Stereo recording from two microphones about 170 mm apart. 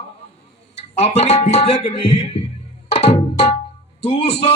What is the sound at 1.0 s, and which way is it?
A man's voice, 40° left (ahead or behind).